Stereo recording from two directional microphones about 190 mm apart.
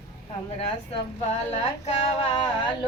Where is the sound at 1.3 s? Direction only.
35° left (ahead or behind).